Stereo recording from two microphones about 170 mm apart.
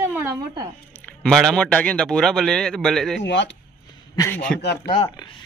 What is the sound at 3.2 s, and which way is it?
Speech, 90° left.